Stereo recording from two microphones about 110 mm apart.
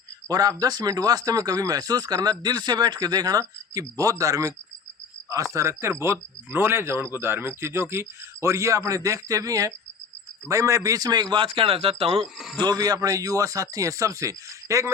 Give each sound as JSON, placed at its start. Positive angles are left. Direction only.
{"t": 0.3, "sound": "a man's voice", "side_deg": -35}
{"t": 12.2, "sound": "a man's voice", "side_deg": 0}
{"t": 12.6, "sound": "speech", "side_deg": -35}